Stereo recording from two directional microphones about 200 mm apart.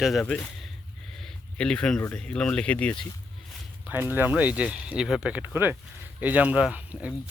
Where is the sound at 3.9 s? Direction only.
10° right (ahead or behind).